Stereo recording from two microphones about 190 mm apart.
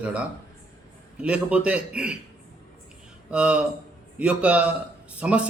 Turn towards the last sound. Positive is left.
turn(degrees=-5)  # may be behind; listen again after turning